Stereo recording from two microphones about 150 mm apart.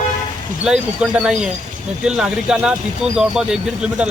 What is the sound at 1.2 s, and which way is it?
Speech, 5° right (ahead or behind).